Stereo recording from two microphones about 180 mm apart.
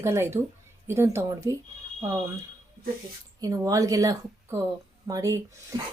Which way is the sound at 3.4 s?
20° right (ahead or behind).